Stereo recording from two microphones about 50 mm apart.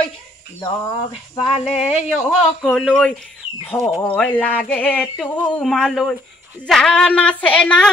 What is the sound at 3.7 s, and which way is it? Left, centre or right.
Speech, left.